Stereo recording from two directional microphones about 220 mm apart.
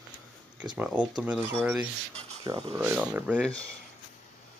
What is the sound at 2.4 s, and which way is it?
Speech, 25° right (ahead or behind).